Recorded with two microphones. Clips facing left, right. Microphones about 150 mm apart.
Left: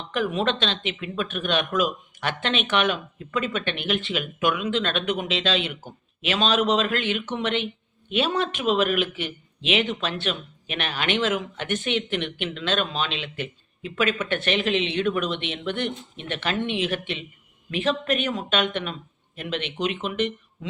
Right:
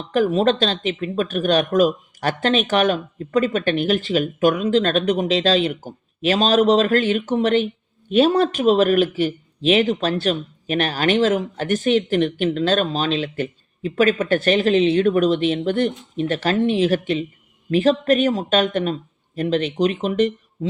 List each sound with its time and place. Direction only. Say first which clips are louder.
0.1 s speech: right 7 dB; 40° right (ahead or behind)